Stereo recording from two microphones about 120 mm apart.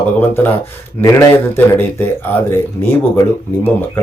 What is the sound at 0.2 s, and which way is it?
Speech, 20° left (ahead or behind).